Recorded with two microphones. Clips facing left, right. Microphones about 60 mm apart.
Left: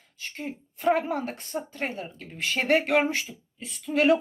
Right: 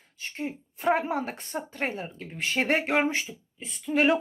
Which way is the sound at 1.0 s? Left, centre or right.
Centre.